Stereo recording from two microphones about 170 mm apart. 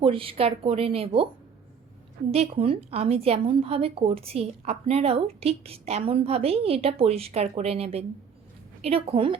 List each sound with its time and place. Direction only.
0.0 s a woman's voice: 35° right (ahead or behind)
2.3 s a woman's voice: 35° right (ahead or behind)